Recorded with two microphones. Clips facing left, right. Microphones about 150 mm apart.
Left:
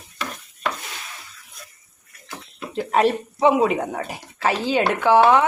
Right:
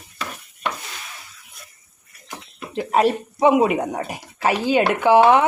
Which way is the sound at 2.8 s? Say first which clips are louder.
Right 1 dB; 5° right (ahead or behind).